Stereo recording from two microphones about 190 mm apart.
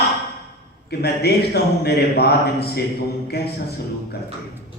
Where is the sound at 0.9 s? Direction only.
55° left (ahead or behind).